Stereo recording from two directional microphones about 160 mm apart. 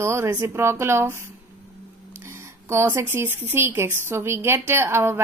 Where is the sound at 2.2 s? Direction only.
15° right (ahead or behind).